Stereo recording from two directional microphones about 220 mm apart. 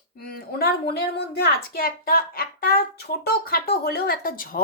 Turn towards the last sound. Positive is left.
turn(degrees=40)  # may be behind; listen again after turning